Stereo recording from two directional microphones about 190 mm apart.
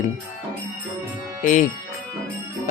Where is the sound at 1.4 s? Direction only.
40° left (ahead or behind).